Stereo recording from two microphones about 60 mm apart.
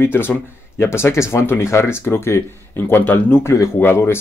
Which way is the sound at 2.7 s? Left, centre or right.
Left.